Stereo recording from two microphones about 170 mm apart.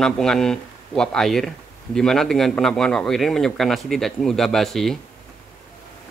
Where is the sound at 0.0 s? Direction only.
5° left (ahead or behind).